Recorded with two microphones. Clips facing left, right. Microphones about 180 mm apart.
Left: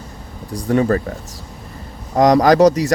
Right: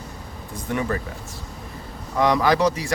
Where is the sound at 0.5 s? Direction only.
35° left (ahead or behind).